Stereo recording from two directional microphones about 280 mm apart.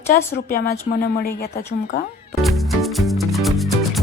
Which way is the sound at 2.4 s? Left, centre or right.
Centre.